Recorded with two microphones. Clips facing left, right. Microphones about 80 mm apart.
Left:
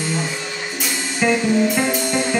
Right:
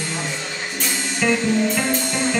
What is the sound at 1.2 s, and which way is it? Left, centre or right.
Music, centre.